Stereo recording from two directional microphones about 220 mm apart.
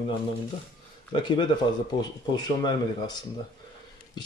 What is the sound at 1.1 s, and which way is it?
Speech, 20° left (ahead or behind).